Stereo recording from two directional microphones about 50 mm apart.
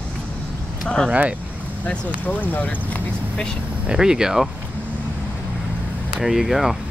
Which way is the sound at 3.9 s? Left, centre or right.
Centre.